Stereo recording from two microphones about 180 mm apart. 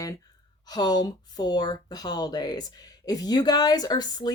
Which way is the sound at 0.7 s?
20° left (ahead or behind).